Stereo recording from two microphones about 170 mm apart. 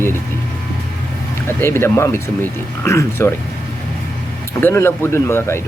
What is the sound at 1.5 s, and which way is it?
Speech, 15° left (ahead or behind).